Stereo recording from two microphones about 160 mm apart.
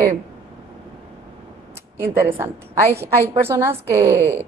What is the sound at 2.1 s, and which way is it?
A woman's voice, 15° right (ahead or behind).